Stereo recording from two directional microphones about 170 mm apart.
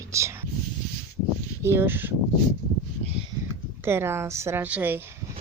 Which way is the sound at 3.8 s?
15° right (ahead or behind).